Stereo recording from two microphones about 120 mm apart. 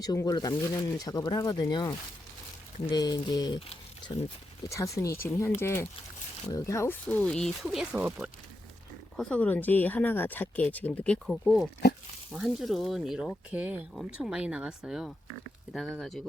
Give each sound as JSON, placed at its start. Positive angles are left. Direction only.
{"t": 0.0, "sound": "speech", "side_deg": 30}
{"t": 4.7, "sound": "speech", "side_deg": 25}
{"t": 7.9, "sound": "speech", "side_deg": -10}
{"t": 9.1, "sound": "speech", "side_deg": 10}
{"t": 11.4, "sound": "speech", "side_deg": -5}